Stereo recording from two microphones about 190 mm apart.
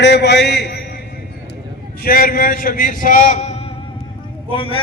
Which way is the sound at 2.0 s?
50° left (ahead or behind).